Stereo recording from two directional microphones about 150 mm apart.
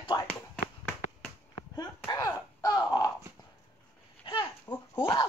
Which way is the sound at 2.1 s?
25° left (ahead or behind).